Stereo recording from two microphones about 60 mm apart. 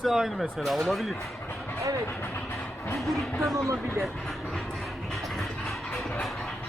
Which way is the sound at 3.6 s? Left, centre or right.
Right.